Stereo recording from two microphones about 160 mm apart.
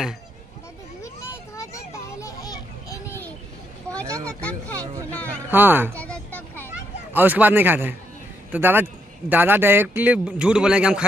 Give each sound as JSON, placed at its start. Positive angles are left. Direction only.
{"t": 1.0, "sound": "children playing", "side_deg": 15}
{"t": 4.4, "sound": "speech", "side_deg": 10}
{"t": 5.5, "sound": "a man's voice", "side_deg": -10}
{"t": 5.9, "sound": "a sound", "side_deg": 10}
{"t": 7.2, "sound": "a man's voice", "side_deg": -10}